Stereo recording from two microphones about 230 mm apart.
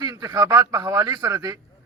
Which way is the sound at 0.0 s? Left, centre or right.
Centre.